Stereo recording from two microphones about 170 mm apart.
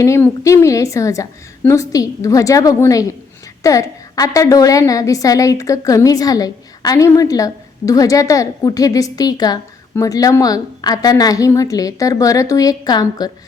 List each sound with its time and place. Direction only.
0.0 s a woman's voice: 15° left (ahead or behind)